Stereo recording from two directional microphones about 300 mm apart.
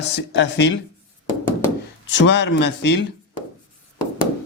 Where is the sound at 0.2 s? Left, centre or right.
Left.